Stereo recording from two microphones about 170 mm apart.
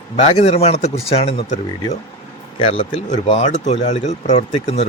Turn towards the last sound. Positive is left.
turn(degrees=40)  # may be behind; listen again after turning